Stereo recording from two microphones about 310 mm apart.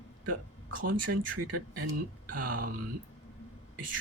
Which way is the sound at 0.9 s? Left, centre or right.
Right.